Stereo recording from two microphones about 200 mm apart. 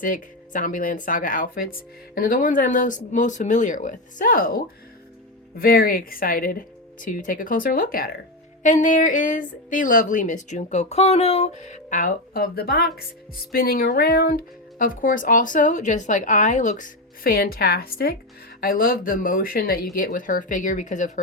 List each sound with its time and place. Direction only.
0.0 s a woman's voice: 45° left (ahead or behind)